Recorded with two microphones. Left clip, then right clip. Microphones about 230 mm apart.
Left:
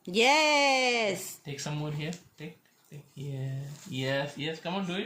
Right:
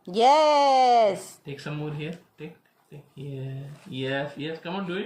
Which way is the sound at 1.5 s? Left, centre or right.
Left.